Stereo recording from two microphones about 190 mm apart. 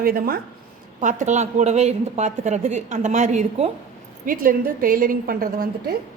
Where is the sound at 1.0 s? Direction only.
40° right (ahead or behind).